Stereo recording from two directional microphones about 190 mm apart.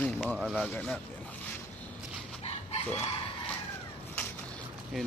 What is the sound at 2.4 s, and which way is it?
Chicken, 35° left (ahead or behind).